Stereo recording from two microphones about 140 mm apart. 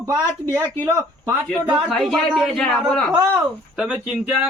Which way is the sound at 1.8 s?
Centre (ahead or behind).